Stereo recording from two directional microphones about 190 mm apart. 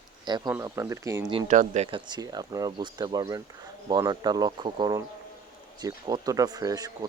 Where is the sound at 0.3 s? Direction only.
25° right (ahead or behind).